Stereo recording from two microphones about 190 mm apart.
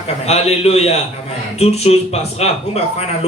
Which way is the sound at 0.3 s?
35° left (ahead or behind).